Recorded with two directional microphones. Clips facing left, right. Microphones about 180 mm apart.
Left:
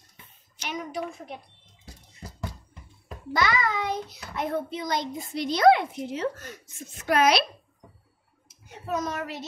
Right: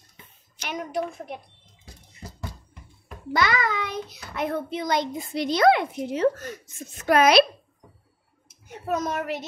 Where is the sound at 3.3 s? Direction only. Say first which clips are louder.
Right 2 dB; 70° right (ahead or behind).